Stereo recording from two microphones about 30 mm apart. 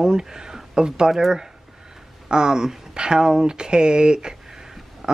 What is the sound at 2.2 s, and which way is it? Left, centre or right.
Speech, right.